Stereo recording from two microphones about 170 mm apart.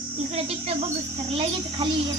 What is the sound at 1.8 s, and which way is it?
Speech, 30° right (ahead or behind).